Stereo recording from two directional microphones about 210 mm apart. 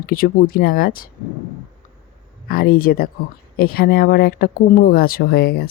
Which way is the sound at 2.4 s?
45° left (ahead or behind).